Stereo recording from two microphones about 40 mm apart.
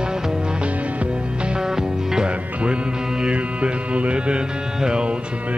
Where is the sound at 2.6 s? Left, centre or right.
Right.